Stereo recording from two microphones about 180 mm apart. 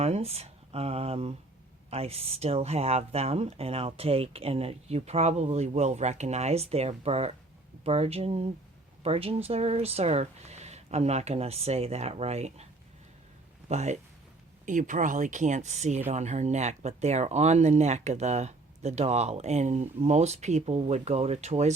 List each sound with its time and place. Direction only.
0.0 s speech: 35° right (ahead or behind)
13.7 s speech: 40° right (ahead or behind)